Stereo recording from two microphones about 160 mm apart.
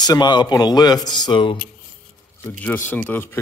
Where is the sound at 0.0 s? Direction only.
25° left (ahead or behind).